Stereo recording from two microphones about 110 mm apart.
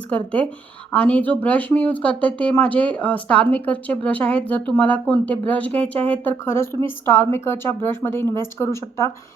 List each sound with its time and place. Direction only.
0.1 s speech: 10° left (ahead or behind)